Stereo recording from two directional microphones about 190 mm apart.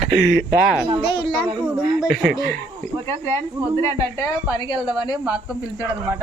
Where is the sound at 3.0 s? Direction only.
15° left (ahead or behind).